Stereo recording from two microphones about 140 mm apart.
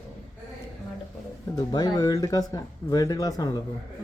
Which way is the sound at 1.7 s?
30° left (ahead or behind).